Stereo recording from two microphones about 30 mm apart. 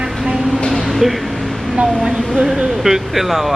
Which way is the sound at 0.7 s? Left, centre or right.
Centre.